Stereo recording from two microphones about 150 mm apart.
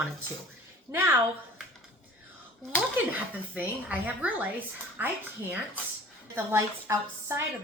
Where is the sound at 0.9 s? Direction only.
15° right (ahead or behind).